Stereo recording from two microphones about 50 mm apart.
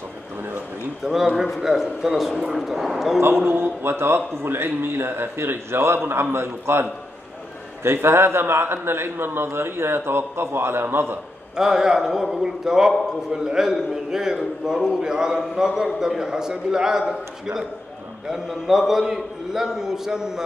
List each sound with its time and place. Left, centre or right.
1.0 s a man's voice: centre
3.4 s a man's voice: right
11.5 s a man's voice: centre
18.3 s a man's voice: centre